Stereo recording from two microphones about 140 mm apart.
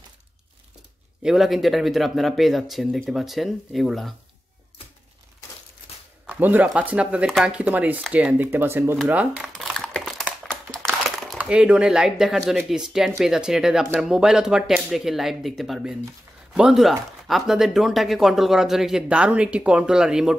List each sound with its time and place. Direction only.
1.2 s speech: 5° right (ahead or behind)
6.2 s speech: 10° right (ahead or behind)
8.9 s crumpling: 5° right (ahead or behind)
11.1 s a sound: centre (ahead or behind)
11.3 s speech: 10° right (ahead or behind)